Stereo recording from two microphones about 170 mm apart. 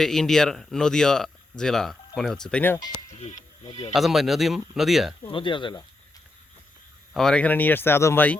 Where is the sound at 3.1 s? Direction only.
40° left (ahead or behind).